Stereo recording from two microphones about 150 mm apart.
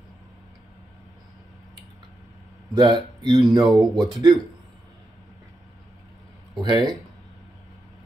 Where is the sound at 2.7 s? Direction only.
30° right (ahead or behind).